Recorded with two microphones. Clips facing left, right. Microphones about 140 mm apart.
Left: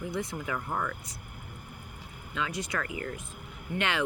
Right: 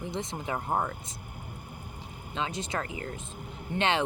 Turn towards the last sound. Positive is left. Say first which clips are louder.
# right 3 dB
turn(degrees=-25)  # may be behind; listen again after turning